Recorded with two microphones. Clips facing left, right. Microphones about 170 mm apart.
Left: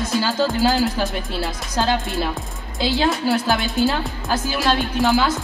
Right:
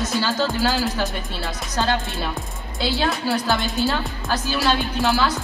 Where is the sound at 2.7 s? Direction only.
20° left (ahead or behind).